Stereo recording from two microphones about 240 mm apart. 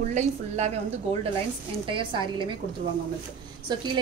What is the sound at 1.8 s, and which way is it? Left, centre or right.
Speech, right.